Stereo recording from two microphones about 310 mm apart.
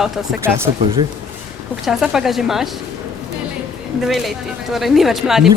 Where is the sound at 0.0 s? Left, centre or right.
Centre.